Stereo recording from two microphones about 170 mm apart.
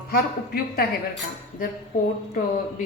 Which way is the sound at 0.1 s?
60° left (ahead or behind).